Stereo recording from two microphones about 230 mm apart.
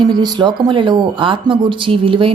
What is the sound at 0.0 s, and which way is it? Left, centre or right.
Speech, centre.